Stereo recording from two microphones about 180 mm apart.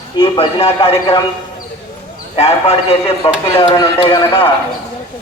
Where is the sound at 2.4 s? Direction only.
35° left (ahead or behind).